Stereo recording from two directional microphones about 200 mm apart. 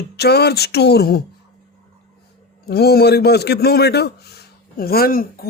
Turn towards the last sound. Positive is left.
turn(degrees=45)  # may be behind; listen again after turning